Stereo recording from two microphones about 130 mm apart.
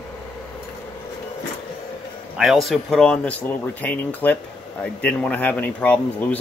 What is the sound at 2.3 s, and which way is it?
Speech, 5° right (ahead or behind).